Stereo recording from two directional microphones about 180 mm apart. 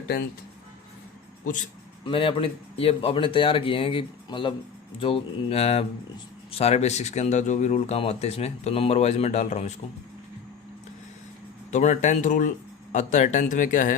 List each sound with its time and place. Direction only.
2.0 s speech: 30° left (ahead or behind)
11.7 s speech: 40° left (ahead or behind)